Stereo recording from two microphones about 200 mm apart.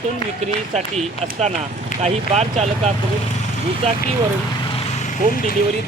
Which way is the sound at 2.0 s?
35° right (ahead or behind).